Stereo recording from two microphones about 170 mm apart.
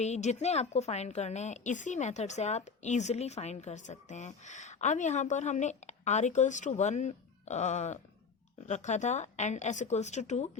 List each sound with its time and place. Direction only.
0.0 s a woman's voice: 40° left (ahead or behind)